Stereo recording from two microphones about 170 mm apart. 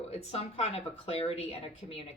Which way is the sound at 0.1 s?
35° left (ahead or behind).